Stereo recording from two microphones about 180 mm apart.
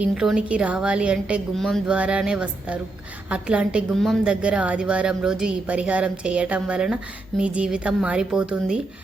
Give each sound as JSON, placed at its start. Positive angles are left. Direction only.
{"t": 0.0, "sound": "a woman's voice", "side_deg": -5}